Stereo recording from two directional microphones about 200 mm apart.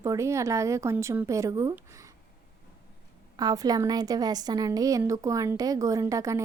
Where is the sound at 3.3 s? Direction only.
20° right (ahead or behind).